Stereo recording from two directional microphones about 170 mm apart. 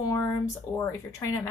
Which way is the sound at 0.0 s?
20° left (ahead or behind).